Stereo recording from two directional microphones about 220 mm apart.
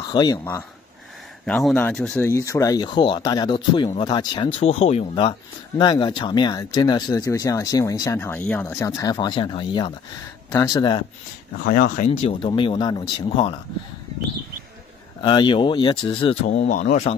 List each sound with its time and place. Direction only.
0.1 s speech: 20° left (ahead or behind)
1.4 s speech: centre (ahead or behind); by 11.1 s 20° left (ahead or behind)
11.5 s speech: 45° left (ahead or behind); by 13.6 s 25° left (ahead or behind)
15.2 s speech: 20° left (ahead or behind)
16.4 s speech: 35° left (ahead or behind)